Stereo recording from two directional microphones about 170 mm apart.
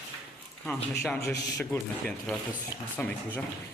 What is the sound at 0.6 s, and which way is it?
Speech, 5° left (ahead or behind).